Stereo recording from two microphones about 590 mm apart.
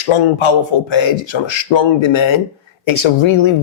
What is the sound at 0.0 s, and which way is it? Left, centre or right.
Speech, left.